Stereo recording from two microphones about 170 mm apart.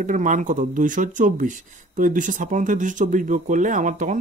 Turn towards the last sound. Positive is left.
turn(degrees=-50)  # may be behind; listen again after turning